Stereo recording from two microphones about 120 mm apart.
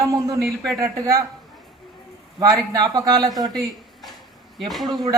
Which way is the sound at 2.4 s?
35° right (ahead or behind).